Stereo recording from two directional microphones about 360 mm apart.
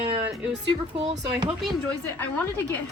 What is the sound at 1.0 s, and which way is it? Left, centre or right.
Speech, centre.